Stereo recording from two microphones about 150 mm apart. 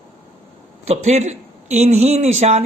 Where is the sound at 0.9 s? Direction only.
50° right (ahead or behind).